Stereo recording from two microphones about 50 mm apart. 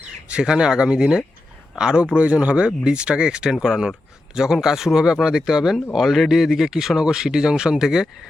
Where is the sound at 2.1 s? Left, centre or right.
Right.